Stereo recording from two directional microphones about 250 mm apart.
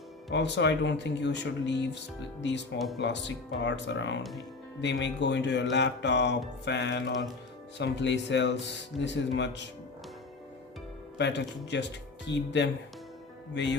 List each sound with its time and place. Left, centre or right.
0.3 s speech: left
2.7 s speech: centre
3.0 s speech: left
11.2 s speech: left